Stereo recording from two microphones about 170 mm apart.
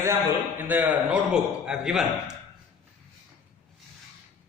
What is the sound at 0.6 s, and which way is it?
A man's voice, 10° right (ahead or behind).